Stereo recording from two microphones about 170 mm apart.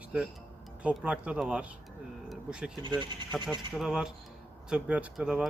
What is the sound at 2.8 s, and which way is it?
Speech, 25° right (ahead or behind).